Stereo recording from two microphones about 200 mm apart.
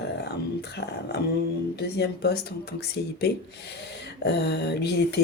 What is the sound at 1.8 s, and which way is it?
Speech, 55° left (ahead or behind).